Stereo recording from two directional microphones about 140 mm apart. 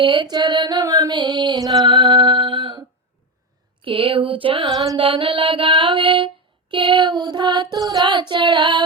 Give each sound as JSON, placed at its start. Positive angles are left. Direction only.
{"t": 0.0, "sound": "music", "side_deg": -35}
{"t": 3.8, "sound": "mantra", "side_deg": -40}